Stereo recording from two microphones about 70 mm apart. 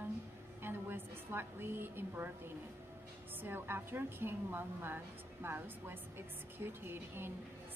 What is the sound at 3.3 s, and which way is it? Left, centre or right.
A woman's voice, right.